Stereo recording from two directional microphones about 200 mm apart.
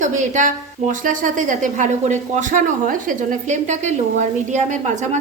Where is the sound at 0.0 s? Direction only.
40° right (ahead or behind).